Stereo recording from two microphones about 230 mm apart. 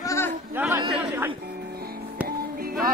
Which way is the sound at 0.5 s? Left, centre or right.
Centre.